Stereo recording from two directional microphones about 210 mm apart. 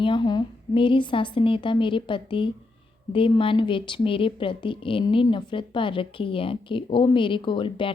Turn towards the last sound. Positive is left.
turn(degrees=25)  # may be behind; listen again after turning